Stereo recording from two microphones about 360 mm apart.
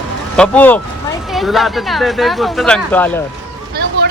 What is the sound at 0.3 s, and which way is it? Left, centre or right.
Speech, centre.